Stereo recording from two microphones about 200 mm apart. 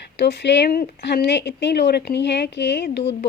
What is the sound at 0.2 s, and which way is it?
A woman's voice, 60° left (ahead or behind).